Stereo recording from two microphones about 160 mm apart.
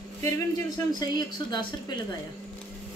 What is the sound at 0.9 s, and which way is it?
Speech, 25° left (ahead or behind).